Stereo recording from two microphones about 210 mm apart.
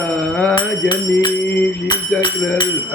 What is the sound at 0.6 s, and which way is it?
Speech, 20° left (ahead or behind).